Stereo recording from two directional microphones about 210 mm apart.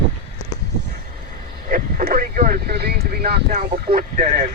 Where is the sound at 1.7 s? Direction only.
45° right (ahead or behind).